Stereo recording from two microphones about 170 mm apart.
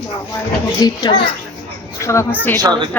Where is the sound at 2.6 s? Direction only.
25° right (ahead or behind).